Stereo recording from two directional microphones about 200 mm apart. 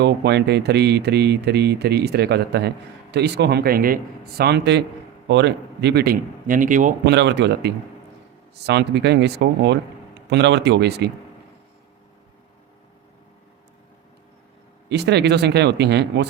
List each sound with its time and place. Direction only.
0.0 s speech: 55° right (ahead or behind); by 6.9 s 40° right (ahead or behind)
7.0 s speech: 55° right (ahead or behind)
14.8 s speech: 60° right (ahead or behind)